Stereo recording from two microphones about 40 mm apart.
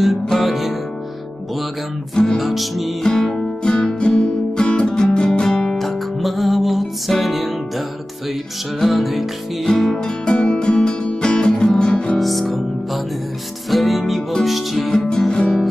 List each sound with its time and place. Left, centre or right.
0.3 s music: centre
2.1 s music: centre
3.0 s music: centre
3.6 s music: centre
5.6 s music: centre
10.0 s music: left
12.2 s music: centre
14.9 s music: centre